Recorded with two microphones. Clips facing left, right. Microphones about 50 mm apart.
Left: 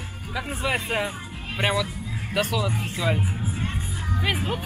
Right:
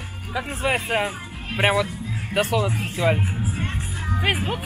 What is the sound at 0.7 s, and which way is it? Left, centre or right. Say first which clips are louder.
Speech: right 3 dB; right.